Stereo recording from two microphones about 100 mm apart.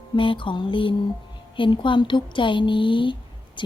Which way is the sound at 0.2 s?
60° left (ahead or behind).